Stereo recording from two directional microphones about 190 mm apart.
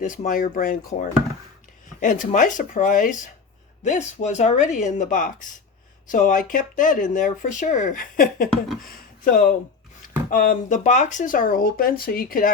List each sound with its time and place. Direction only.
0.0 s speech: 40° left (ahead or behind)